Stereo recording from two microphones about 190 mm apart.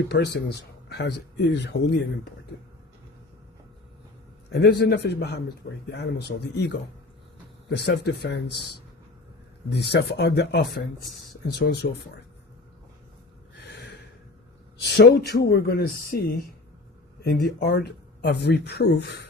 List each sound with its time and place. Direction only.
0.1 s speech: 60° left (ahead or behind)
4.5 s speech: 60° left (ahead or behind)
9.7 s speech: 60° left (ahead or behind)
13.6 s gasp: 65° left (ahead or behind)
14.8 s speech: 60° left (ahead or behind)
17.2 s speech: 55° left (ahead or behind)